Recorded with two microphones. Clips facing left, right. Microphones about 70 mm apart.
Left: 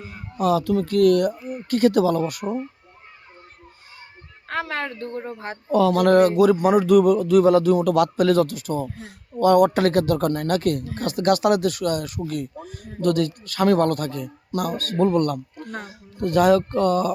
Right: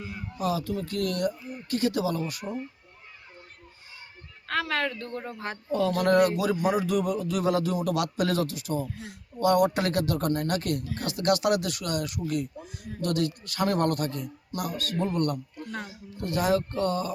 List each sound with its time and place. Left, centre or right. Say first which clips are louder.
0.0 s speech: left 7 dB; left
4.4 s a woman's voice: left 1 dB; left
5.7 s speech: left 7 dB; left
6.1 s speech: left 7 dB; left